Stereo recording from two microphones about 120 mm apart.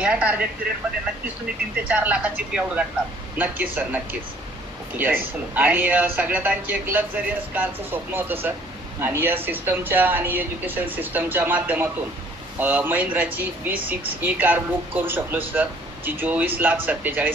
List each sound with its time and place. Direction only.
0.0 s speech: 10° right (ahead or behind)
1.9 s speech: 10° right (ahead or behind)